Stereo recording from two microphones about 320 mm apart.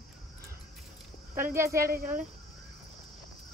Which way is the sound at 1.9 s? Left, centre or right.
Right.